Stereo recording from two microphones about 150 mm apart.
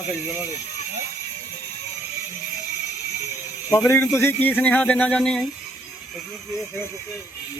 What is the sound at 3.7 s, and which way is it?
Speech, 20° left (ahead or behind).